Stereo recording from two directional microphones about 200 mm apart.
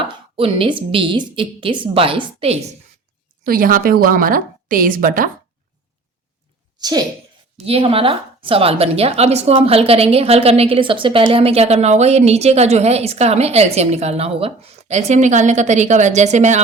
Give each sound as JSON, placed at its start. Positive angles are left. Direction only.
{"t": 0.0, "sound": "a woman's voice", "side_deg": -25}
{"t": 3.4, "sound": "a woman's voice", "side_deg": -45}
{"t": 6.7, "sound": "a woman's voice", "side_deg": -20}